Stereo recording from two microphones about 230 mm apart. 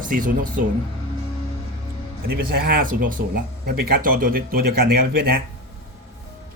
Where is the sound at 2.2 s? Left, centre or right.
Right.